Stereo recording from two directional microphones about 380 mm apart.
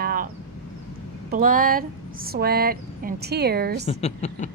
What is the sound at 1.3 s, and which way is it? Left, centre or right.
A woman's voice, right.